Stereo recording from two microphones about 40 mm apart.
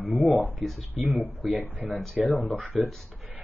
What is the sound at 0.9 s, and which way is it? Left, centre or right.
Speech, right.